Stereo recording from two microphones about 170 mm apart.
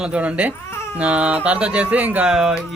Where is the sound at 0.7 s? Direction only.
15° left (ahead or behind).